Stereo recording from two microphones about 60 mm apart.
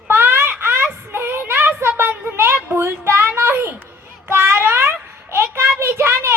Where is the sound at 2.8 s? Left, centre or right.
Right.